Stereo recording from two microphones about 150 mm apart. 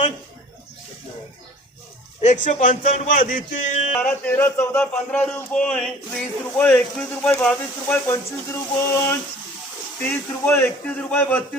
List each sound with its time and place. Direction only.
2.2 s a man's voice: 55° left (ahead or behind)
4.0 s a man's voice: 10° left (ahead or behind)